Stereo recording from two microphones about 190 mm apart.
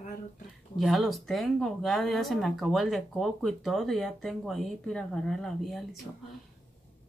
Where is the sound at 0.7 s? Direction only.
Centre (ahead or behind).